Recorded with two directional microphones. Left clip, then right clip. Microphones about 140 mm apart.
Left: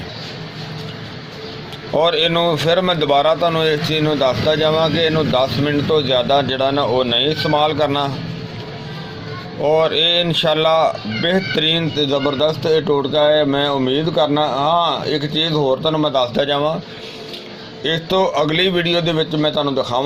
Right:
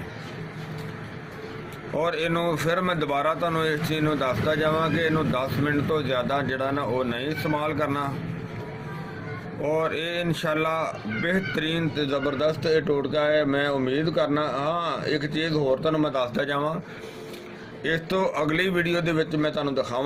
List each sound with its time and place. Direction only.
2.0 s a man's voice: 35° left (ahead or behind)
9.6 s a man's voice: 35° left (ahead or behind)
17.8 s a man's voice: 40° left (ahead or behind)